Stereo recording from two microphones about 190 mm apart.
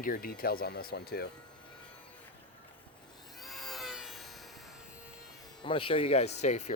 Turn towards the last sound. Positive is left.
turn(degrees=40)  # may be behind; listen again after turning